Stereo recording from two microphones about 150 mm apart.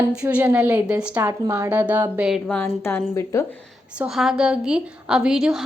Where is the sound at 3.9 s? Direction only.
Centre (ahead or behind).